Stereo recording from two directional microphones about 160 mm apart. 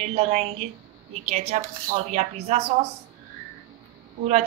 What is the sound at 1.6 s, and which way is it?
Speech, 60° right (ahead or behind).